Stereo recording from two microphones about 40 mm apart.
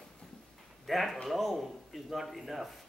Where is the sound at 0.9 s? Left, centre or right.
Centre.